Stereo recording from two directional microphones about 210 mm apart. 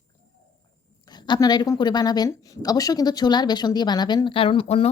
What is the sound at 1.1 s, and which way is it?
A woman's voice, 20° left (ahead or behind).